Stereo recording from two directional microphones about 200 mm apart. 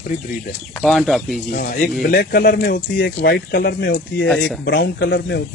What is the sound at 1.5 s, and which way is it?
Speech, 40° left (ahead or behind).